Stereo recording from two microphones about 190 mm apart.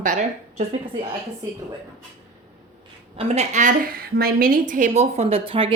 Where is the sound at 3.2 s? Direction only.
35° right (ahead or behind).